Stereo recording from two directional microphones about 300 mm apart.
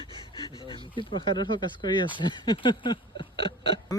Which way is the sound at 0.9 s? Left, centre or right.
Centre.